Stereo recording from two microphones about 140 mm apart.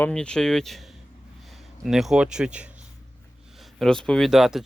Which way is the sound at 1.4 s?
Centre (ahead or behind).